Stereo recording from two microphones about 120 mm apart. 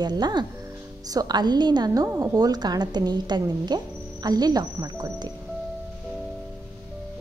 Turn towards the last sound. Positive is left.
turn(degrees=-35)  # may be behind; listen again after turning